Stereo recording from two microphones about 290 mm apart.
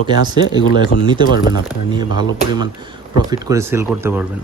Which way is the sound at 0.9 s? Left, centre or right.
Left.